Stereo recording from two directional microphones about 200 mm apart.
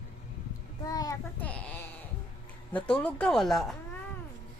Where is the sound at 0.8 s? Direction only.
20° left (ahead or behind); by 3.7 s centre (ahead or behind).